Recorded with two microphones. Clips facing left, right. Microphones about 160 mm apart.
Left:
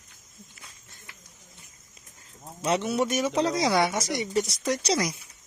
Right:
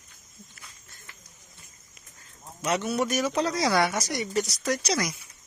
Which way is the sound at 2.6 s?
25° left (ahead or behind).